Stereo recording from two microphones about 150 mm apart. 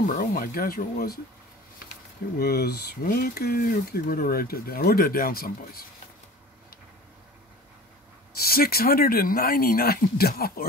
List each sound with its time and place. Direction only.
0.0 s speech: 65° left (ahead or behind); by 1.2 s 85° left
2.3 s speech: 90° left
8.4 s speech: 90° left